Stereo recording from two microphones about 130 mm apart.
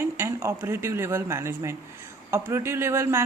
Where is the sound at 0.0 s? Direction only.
20° right (ahead or behind).